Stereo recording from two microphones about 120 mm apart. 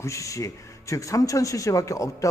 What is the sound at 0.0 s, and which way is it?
A man's voice, 25° left (ahead or behind).